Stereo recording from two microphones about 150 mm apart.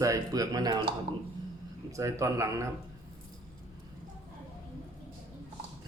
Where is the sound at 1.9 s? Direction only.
20° right (ahead or behind).